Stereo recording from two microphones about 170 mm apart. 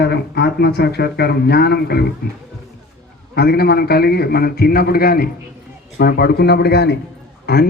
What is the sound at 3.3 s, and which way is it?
A man's voice, 70° left (ahead or behind).